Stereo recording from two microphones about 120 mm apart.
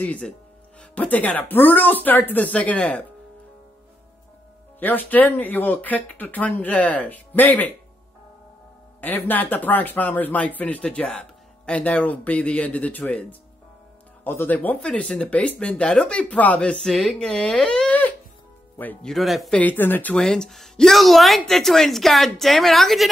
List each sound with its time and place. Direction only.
0.0 s speech: 10° left (ahead or behind)
4.7 s speech: 15° left (ahead or behind)
9.0 s speech: 15° left (ahead or behind)
19.0 s a woman's voice: centre (ahead or behind)
19.6 s a woman's voice: 15° left (ahead or behind)